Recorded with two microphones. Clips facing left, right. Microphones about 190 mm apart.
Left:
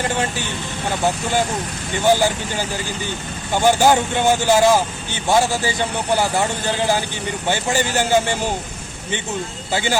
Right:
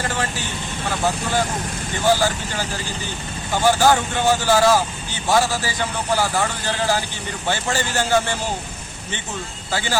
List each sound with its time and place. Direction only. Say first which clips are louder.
2.0 s speech: left 2 dB; 20° left (ahead or behind)
3.5 s speech: left 2 dB; 20° left (ahead or behind)
7.4 s a man's voice: left 2 dB; 15° left (ahead or behind)
9.7 s speech: left 3 dB; 20° left (ahead or behind)